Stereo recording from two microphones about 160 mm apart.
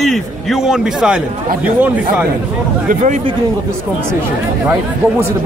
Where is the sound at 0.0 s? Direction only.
Centre (ahead or behind).